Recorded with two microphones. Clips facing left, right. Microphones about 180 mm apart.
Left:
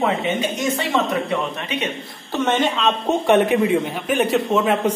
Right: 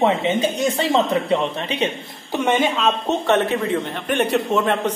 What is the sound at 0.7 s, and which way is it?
Speech, 30° right (ahead or behind).